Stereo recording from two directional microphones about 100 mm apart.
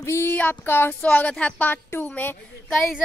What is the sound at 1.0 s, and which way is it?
A woman's voice, 10° left (ahead or behind).